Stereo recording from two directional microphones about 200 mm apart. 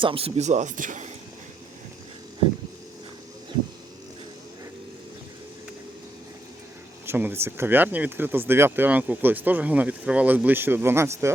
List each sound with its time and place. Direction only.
0.0 s speech: 25° right (ahead or behind)
7.0 s speech: 10° right (ahead or behind)